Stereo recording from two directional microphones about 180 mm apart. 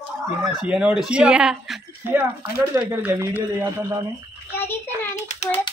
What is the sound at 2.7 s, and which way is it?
Speech, 20° right (ahead or behind).